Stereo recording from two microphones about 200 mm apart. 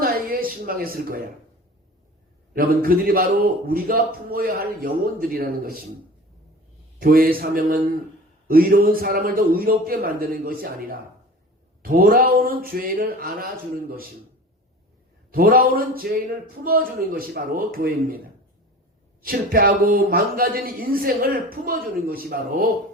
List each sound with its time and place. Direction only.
0.0 s a woman's voice: 45° right (ahead or behind)
2.5 s speech: 45° right (ahead or behind)
7.0 s speech: 45° right (ahead or behind)
15.3 s speech: 45° right (ahead or behind)
19.2 s speech: 45° right (ahead or behind)